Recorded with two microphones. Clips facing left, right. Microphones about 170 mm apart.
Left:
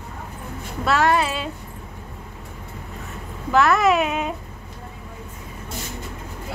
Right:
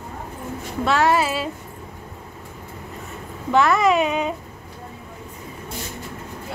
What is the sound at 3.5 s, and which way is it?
Speech, centre (ahead or behind).